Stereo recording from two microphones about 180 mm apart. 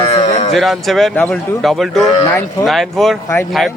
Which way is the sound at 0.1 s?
35° left (ahead or behind).